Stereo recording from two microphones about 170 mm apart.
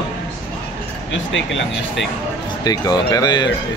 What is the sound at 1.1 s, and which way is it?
Speech, 90° left.